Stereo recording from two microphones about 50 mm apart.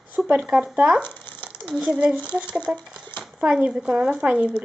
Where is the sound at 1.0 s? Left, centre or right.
Left.